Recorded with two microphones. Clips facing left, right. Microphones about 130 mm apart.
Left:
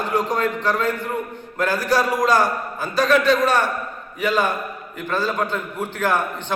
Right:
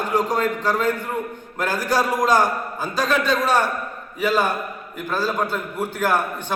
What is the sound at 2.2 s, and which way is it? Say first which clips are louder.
A man's voice: even; 15° right (ahead or behind).